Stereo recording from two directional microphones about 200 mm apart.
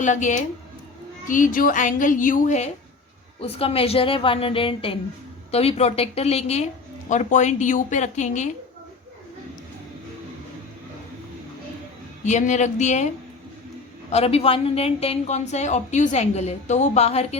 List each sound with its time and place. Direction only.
0.0 s a woman's voice: 35° left (ahead or behind)
12.2 s a woman's voice: 35° left (ahead or behind)
14.1 s a woman's voice: 30° left (ahead or behind)